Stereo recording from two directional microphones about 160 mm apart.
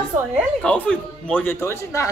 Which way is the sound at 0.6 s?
5° left (ahead or behind).